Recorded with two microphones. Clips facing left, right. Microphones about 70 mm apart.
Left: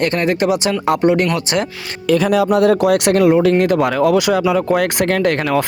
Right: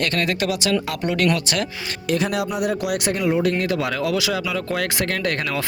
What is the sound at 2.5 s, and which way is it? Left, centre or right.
Speech, left.